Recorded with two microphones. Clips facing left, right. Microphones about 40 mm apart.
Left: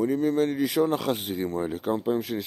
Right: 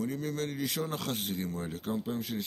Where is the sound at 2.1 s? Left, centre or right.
Centre.